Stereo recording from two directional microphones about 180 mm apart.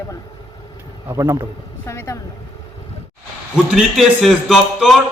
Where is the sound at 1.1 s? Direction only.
15° right (ahead or behind).